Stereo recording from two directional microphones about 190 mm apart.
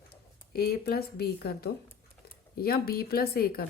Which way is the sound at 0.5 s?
55° left (ahead or behind).